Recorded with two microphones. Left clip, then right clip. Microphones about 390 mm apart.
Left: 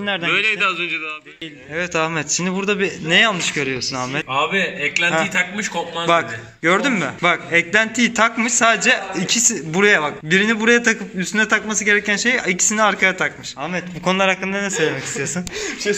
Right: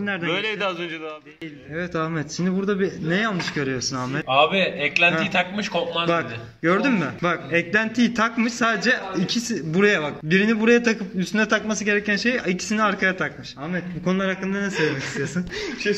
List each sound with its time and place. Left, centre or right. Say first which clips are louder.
0.0 s a man's voice: left 5 dB; centre
0.3 s a man's voice: left 8 dB; centre
1.8 s a man's voice: left 6 dB; centre